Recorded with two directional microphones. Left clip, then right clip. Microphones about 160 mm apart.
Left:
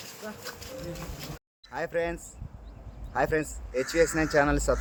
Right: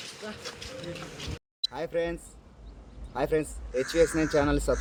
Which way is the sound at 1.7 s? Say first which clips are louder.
Left 3 dB; centre (ahead or behind).